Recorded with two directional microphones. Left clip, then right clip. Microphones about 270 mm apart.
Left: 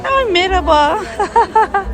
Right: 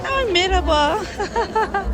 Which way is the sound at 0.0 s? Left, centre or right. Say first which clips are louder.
Left 5 dB; centre.